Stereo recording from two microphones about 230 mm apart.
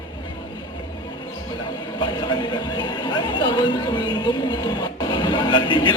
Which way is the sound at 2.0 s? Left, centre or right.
Centre.